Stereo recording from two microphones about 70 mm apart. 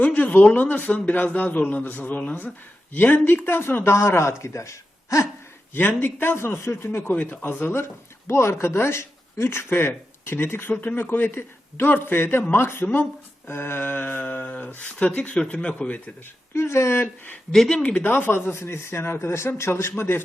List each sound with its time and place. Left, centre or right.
0.0 s a man's voice: left
6.0 s speech: left
7.1 s a man's voice: left
16.6 s speech: left
17.5 s speech: centre
17.8 s speech: left